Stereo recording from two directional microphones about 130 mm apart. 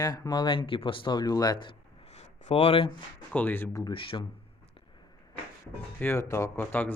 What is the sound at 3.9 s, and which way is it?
Speech, 40° left (ahead or behind).